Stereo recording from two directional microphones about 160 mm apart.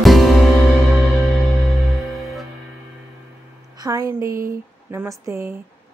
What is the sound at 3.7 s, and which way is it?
A woman's voice, 25° right (ahead or behind).